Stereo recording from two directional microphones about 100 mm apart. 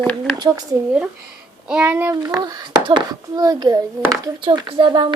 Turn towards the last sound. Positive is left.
turn(degrees=-55)  # may be behind; listen again after turning